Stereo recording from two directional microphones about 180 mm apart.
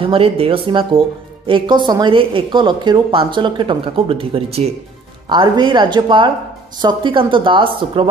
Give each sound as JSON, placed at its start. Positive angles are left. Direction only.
{"t": 0.0, "sound": "speech", "side_deg": -30}